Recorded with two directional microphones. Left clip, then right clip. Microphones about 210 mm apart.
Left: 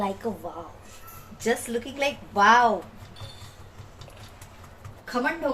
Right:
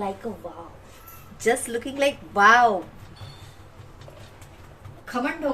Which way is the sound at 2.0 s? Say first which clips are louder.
Right 3 dB; 25° right (ahead or behind).